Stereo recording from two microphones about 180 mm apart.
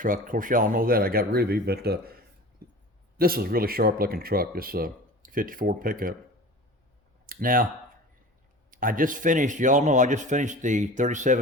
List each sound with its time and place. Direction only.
0.0 s speech: 50° right (ahead or behind)
7.3 s speech: 55° right (ahead or behind)
8.7 s speech: 50° right (ahead or behind)